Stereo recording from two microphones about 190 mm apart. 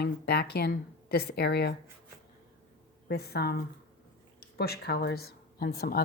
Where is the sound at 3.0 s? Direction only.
55° left (ahead or behind).